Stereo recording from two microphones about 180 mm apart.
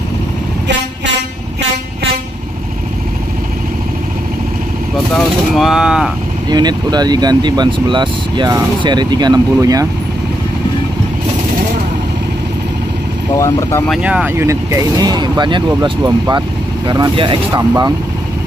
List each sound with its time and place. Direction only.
5.1 s speech: centre (ahead or behind)
6.5 s speech: 25° right (ahead or behind)
13.4 s speech: 15° left (ahead or behind)
14.0 s speech: 10° right (ahead or behind)